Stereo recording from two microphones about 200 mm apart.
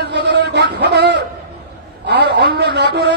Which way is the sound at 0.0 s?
60° right (ahead or behind).